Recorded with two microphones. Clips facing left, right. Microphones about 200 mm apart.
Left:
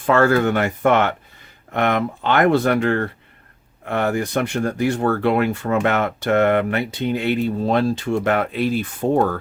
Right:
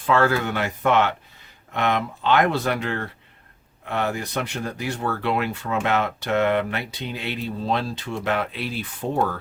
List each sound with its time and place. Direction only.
0.0 s speech: 50° left (ahead or behind)